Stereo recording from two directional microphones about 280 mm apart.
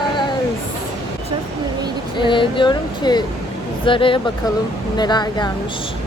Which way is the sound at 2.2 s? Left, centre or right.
Centre.